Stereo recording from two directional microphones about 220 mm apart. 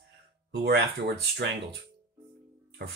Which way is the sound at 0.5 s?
50° right (ahead or behind).